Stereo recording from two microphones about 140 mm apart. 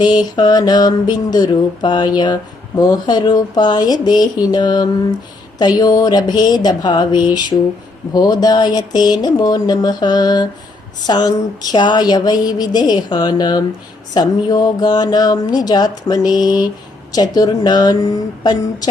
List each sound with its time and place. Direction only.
0.0 s speech: 30° left (ahead or behind)